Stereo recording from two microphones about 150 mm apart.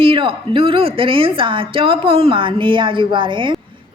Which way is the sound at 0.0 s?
35° right (ahead or behind).